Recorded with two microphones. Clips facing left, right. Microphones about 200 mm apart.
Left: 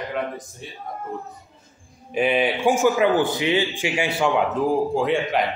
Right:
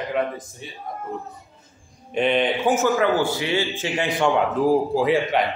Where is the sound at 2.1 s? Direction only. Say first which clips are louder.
Even; 5° left (ahead or behind).